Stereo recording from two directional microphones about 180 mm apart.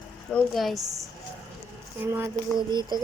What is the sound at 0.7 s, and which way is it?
Speech, 20° right (ahead or behind).